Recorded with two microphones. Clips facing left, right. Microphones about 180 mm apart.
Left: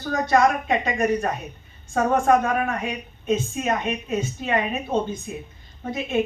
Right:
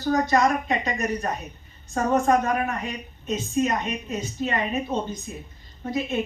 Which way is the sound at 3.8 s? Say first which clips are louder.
Left 4 dB; 50° left (ahead or behind).